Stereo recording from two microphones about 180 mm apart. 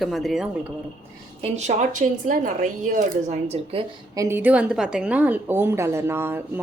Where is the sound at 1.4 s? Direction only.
40° right (ahead or behind).